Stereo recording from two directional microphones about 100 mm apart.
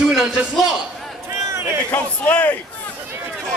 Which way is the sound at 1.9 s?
15° left (ahead or behind).